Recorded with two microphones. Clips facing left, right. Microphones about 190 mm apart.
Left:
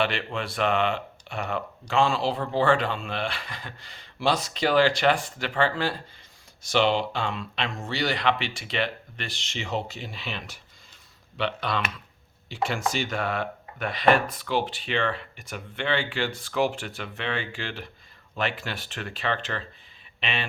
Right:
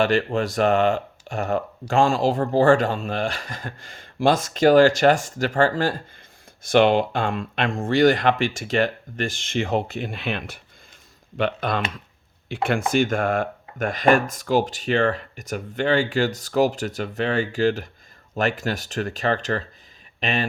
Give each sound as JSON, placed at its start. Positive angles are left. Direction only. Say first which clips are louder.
{"t": 0.0, "sound": "speech", "louder": "right 7 dB", "side_deg": -45}